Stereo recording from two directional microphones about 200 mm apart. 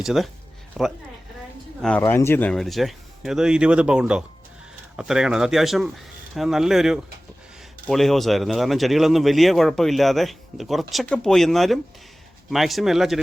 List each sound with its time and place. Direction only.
0.0 s speech: centre (ahead or behind)